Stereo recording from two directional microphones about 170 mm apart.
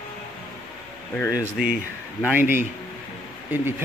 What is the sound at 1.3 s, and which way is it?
Speech, 5° right (ahead or behind).